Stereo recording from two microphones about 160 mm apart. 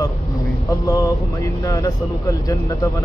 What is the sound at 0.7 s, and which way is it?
Speech, 20° left (ahead or behind).